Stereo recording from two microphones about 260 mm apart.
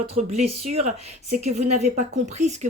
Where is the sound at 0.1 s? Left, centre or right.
Right.